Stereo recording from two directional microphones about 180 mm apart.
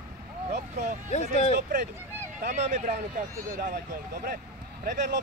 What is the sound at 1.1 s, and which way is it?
Speech, 40° left (ahead or behind).